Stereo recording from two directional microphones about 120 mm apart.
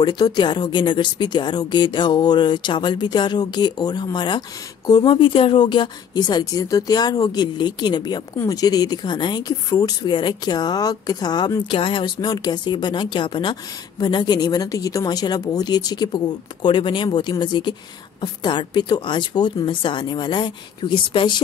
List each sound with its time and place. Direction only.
0.0 s speech: 40° left (ahead or behind)